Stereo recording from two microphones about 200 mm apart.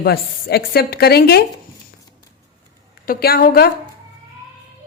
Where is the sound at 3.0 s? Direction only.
50° left (ahead or behind).